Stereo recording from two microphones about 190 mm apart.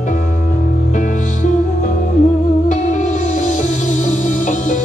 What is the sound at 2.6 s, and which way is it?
Music, 40° left (ahead or behind).